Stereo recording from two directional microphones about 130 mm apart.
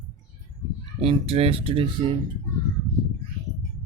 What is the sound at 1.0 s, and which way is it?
Speech, 50° right (ahead or behind).